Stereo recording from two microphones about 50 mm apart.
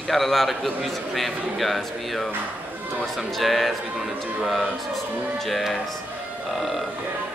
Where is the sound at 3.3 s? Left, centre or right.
Centre.